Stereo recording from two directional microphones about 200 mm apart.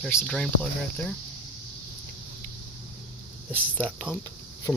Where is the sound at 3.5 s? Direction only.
5° left (ahead or behind).